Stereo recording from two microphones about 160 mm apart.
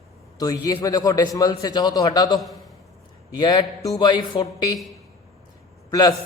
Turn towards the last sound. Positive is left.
turn(degrees=25)  # may be behind; listen again after turning